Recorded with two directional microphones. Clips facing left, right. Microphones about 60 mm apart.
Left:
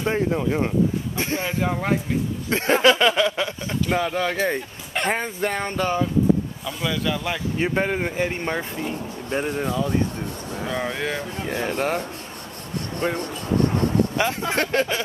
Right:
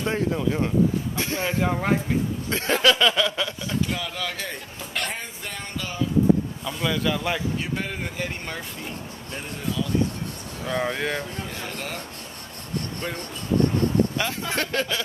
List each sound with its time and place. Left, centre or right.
0.0 s speech: left
1.4 s speech: centre
2.5 s speech: left
5.1 s a sound: left
6.6 s speech: centre
7.5 s speech: left
9.3 s speech: left
10.7 s speech: centre
11.4 s speech: left
13.0 s speech: left